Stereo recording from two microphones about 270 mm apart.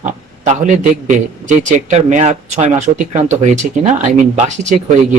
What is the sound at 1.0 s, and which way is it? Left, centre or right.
Speech, right.